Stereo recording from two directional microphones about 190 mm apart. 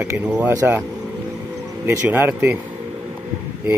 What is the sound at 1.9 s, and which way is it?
Speech, 10° right (ahead or behind).